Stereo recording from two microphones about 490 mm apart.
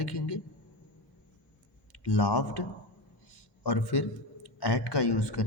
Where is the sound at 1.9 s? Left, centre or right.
Left.